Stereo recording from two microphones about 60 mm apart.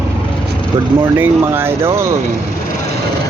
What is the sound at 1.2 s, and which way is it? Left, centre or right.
Speech, right.